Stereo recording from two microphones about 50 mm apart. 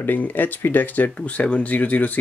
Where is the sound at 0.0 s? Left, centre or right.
Left.